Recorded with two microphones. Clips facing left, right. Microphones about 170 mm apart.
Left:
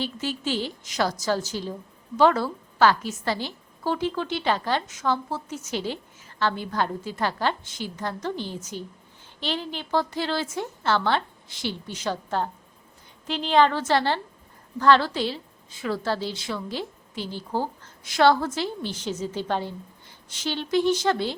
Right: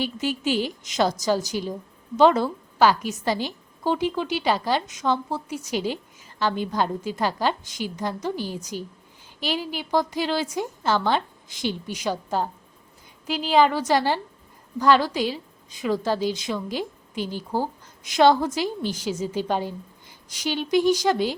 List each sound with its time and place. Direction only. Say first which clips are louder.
0.0 s a woman's voice: right 3 dB; 15° right (ahead or behind)